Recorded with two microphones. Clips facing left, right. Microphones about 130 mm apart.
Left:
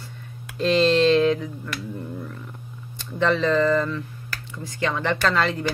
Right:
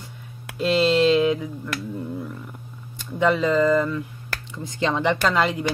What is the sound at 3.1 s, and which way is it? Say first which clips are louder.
Speech: right 1 dB; 10° right (ahead or behind).